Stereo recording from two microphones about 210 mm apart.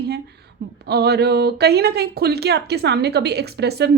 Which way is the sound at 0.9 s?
50° right (ahead or behind).